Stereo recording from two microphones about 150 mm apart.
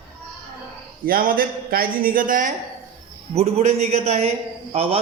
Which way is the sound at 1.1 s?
70° right (ahead or behind).